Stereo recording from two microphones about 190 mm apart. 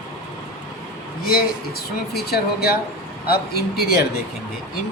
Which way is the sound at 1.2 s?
55° left (ahead or behind).